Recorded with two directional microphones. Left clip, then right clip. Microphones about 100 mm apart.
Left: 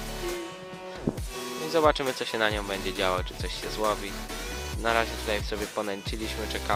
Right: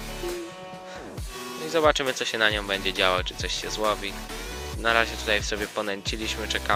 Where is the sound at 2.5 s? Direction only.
5° left (ahead or behind).